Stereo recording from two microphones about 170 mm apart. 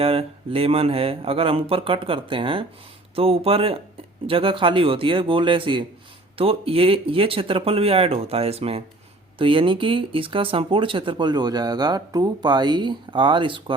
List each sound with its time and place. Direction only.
0.0 s speech: 35° right (ahead or behind)